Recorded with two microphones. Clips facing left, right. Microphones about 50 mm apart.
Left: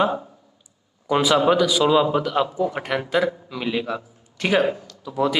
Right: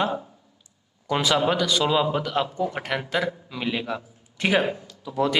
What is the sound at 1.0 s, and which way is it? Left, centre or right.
Speech, centre.